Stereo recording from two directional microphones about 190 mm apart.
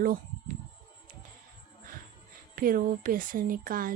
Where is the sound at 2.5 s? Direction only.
50° right (ahead or behind).